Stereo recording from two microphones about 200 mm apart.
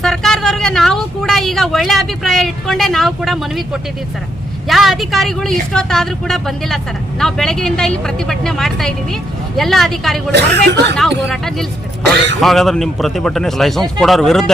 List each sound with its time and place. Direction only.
0.0 s speech: centre (ahead or behind)
10.3 s speech: 60° right (ahead or behind)
11.3 s speech: centre (ahead or behind)